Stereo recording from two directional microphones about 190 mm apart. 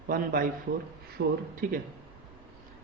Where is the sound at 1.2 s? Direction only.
70° right (ahead or behind).